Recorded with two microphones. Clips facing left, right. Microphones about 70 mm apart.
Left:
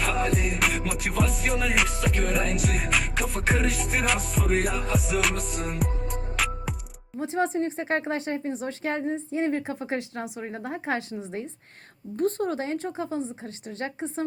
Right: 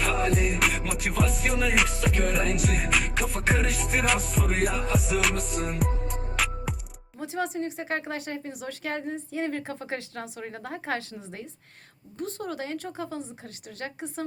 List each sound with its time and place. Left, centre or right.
0.0 s music: centre
7.2 s speech: left
12.1 s speech: left